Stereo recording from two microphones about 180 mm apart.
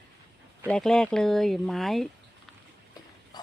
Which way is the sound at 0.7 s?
5° left (ahead or behind).